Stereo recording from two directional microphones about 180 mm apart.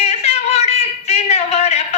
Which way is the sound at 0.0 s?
35° left (ahead or behind).